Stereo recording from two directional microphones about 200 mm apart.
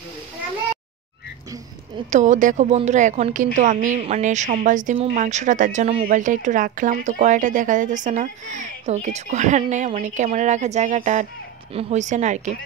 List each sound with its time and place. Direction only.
2.0 s a woman's voice: 40° right (ahead or behind)